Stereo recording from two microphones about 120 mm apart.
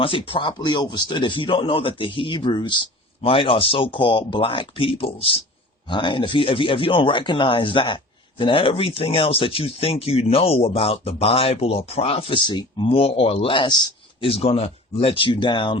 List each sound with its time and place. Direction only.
0.0 s speech: 45° left (ahead or behind)
14.3 s speech: 55° left (ahead or behind)